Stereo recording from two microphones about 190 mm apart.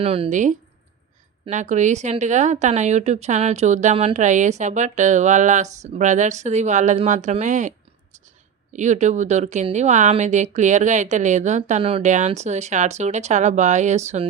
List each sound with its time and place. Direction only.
0.0 s speech: 30° right (ahead or behind)
8.7 s speech: 40° right (ahead or behind)